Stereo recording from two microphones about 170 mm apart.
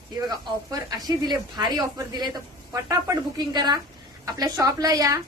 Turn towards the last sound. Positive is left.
turn(degrees=-20)  # may be behind; listen again after turning